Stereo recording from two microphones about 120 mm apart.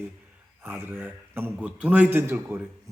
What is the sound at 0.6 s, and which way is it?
A man's voice, 20° right (ahead or behind).